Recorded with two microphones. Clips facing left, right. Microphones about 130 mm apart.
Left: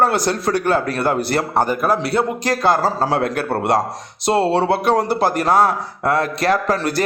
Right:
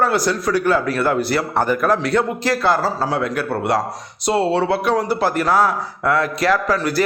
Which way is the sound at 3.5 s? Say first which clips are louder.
Left 2 dB; 45° left (ahead or behind).